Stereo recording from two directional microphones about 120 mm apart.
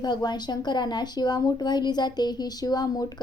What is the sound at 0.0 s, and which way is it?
A woman's voice, 35° left (ahead or behind).